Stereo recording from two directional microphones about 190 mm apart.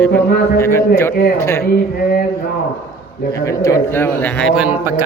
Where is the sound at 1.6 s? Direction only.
50° left (ahead or behind).